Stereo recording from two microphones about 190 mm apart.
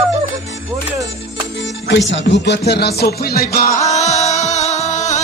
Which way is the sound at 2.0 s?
70° left (ahead or behind).